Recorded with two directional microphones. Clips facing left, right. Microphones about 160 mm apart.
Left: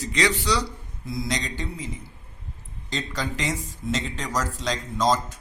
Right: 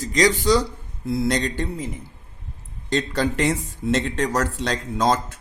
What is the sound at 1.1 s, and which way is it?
Speech, 60° right (ahead or behind).